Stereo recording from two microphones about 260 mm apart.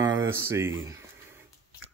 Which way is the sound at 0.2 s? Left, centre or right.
Centre.